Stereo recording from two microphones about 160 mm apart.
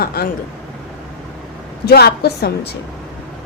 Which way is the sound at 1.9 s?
80° left.